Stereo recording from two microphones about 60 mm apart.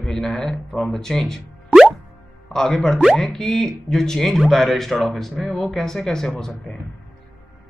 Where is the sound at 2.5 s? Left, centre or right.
Centre.